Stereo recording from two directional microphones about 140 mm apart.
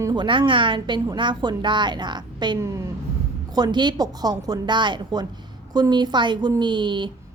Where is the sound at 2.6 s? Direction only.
20° right (ahead or behind).